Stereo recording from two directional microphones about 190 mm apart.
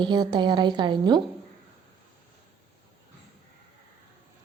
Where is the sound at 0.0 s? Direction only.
25° right (ahead or behind).